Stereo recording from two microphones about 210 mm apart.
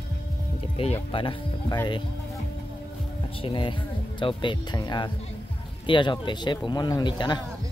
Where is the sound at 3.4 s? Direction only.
25° left (ahead or behind).